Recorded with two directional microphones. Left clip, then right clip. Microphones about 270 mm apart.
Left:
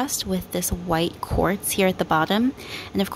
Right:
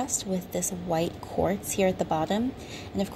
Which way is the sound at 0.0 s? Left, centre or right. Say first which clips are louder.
Left 4 dB; left.